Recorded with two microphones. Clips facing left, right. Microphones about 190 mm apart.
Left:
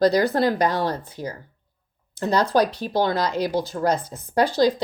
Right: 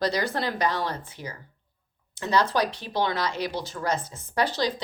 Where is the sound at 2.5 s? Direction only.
40° left (ahead or behind).